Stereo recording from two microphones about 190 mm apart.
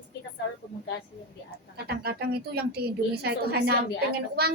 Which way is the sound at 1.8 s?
55° right (ahead or behind).